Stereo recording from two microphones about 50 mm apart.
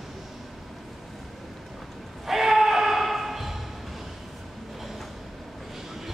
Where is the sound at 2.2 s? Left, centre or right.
Centre.